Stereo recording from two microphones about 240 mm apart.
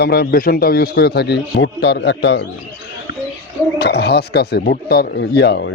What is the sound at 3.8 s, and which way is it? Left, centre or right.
Speech, left.